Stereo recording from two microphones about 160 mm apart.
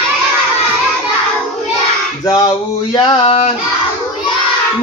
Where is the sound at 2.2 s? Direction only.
25° left (ahead or behind).